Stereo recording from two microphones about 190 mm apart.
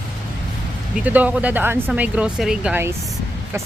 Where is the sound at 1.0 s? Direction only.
10° right (ahead or behind).